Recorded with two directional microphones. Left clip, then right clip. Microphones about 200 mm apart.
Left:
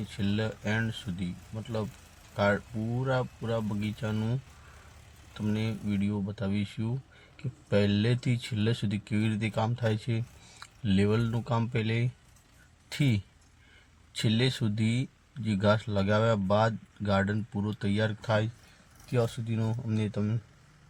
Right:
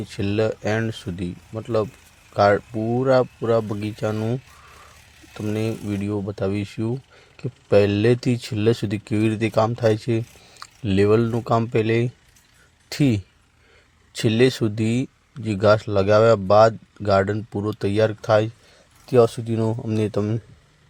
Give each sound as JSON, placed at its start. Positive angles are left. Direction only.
{"t": 0.2, "sound": "speech", "side_deg": -40}
{"t": 5.5, "sound": "speech", "side_deg": -35}
{"t": 14.2, "sound": "speech", "side_deg": -35}